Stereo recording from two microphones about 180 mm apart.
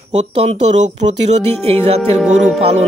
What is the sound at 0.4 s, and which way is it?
Speech, 35° right (ahead or behind).